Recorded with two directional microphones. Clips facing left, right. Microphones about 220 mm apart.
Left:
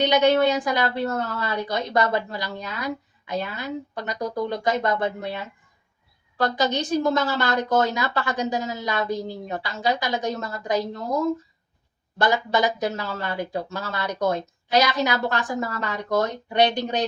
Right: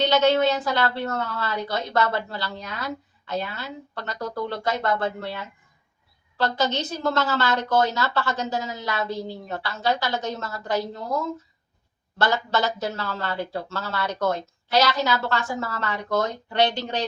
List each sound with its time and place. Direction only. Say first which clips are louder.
0.0 s speech: left 1 dB; 15° left (ahead or behind)